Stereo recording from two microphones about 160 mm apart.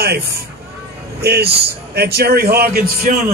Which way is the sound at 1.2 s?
90° right.